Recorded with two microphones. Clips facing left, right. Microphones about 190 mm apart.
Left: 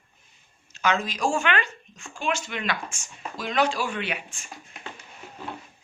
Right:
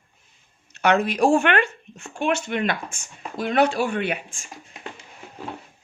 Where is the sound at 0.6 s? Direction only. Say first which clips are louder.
Right 6 dB; 65° right (ahead or behind).